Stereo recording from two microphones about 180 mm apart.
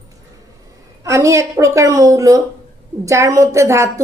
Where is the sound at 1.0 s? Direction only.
15° right (ahead or behind).